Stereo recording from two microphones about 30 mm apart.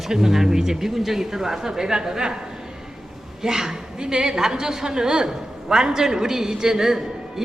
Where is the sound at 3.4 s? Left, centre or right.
Centre.